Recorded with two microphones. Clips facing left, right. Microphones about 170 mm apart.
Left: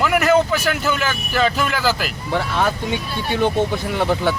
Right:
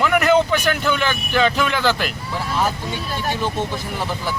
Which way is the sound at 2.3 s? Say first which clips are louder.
Left 6 dB; 70° left (ahead or behind).